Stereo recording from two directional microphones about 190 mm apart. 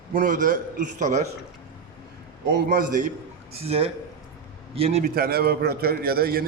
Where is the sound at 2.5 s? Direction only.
50° right (ahead or behind).